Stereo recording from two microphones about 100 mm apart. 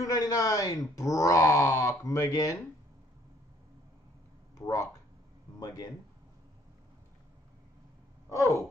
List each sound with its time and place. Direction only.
0.0 s speech: 35° left (ahead or behind)
4.6 s speech: 30° left (ahead or behind)
8.3 s a sound: 30° left (ahead or behind)